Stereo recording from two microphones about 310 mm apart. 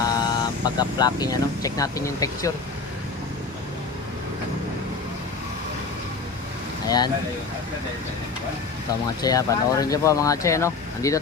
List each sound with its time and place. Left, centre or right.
0.0 s speech: centre
6.8 s speech: centre
9.2 s speech: centre